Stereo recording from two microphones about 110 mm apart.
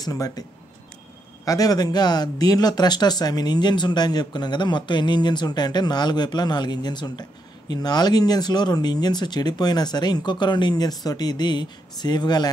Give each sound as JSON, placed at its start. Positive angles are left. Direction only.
{"t": 0.0, "sound": "speech", "side_deg": 35}
{"t": 1.4, "sound": "speech", "side_deg": 35}